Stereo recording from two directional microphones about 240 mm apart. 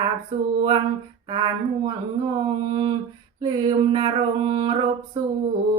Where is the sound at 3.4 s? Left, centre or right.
Centre.